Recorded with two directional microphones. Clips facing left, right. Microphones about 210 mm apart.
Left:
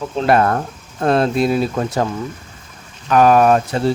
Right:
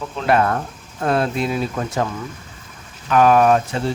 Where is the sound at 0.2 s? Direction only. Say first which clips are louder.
Left 3 dB; 40° left (ahead or behind).